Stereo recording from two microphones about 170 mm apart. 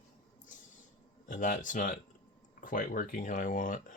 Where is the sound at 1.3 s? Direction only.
50° left (ahead or behind).